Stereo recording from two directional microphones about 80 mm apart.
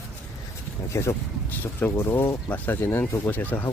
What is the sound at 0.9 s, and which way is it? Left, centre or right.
Speech, left.